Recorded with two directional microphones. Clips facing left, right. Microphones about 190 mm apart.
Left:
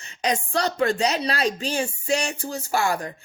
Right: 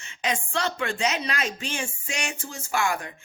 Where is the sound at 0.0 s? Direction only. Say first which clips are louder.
Left 4 dB; 40° left (ahead or behind).